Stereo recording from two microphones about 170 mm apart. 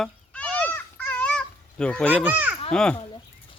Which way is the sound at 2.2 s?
10° right (ahead or behind).